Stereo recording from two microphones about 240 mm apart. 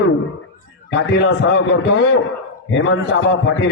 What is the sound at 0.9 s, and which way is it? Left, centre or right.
A man's voice, left.